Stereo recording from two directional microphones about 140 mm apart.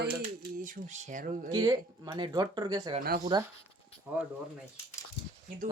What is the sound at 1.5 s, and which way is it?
Speech, 25° right (ahead or behind).